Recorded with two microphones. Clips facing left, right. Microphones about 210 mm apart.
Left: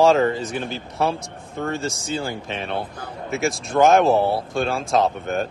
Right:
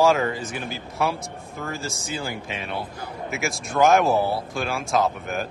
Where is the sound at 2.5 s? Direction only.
55° left (ahead or behind).